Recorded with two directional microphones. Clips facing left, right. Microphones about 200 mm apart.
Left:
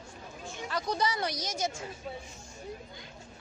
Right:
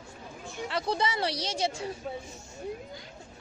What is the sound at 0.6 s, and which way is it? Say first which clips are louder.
A woman's voice: right 2 dB; 25° right (ahead or behind).